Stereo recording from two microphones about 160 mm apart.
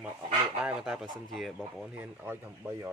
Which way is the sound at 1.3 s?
Centre (ahead or behind).